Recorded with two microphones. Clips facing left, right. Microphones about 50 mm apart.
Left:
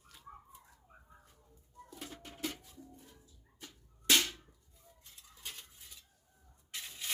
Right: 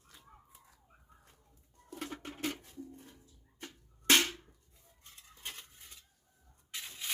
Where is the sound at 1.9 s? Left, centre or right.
Right.